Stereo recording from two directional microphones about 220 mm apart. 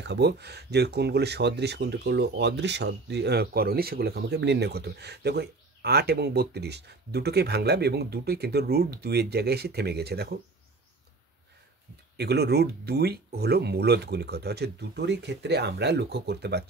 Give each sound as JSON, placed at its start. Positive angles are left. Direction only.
{"t": 0.0, "sound": "speech", "side_deg": -50}
{"t": 12.2, "sound": "speech", "side_deg": -50}